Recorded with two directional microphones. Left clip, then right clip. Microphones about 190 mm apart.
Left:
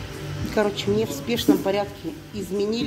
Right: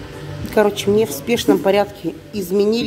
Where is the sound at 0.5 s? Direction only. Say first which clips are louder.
Right 8 dB; 30° right (ahead or behind).